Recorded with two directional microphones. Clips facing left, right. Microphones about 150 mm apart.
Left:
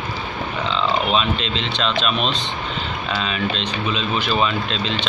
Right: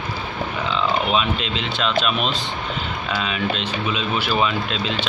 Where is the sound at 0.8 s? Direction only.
10° right (ahead or behind).